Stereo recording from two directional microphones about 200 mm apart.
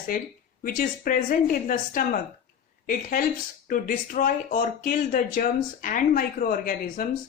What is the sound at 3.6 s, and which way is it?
A woman's voice, 40° left (ahead or behind).